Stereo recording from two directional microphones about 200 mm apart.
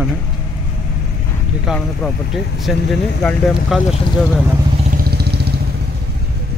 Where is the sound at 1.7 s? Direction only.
Centre (ahead or behind).